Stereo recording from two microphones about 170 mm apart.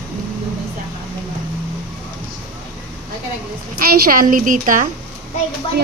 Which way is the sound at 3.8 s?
60° right (ahead or behind).